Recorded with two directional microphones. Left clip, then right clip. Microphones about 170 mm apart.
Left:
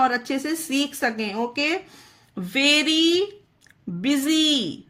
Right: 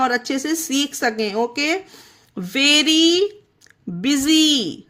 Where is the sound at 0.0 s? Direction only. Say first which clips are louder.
Right 2 dB; 25° right (ahead or behind).